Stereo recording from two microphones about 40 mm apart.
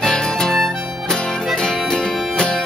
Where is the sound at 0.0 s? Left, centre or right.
Centre.